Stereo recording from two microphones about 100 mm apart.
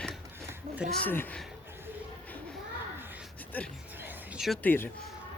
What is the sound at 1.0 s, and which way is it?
Speech, 20° left (ahead or behind).